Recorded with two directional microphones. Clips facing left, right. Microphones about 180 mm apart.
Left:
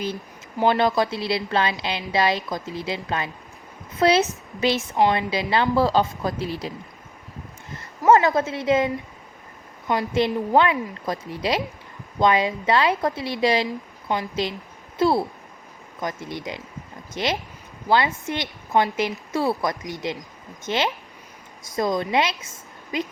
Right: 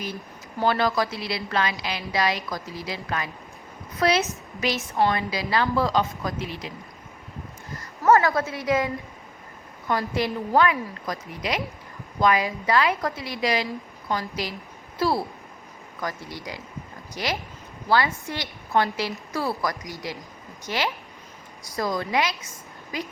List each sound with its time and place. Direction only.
0.6 s a woman's voice: 20° left (ahead or behind)
7.8 s a woman's voice: 20° left (ahead or behind)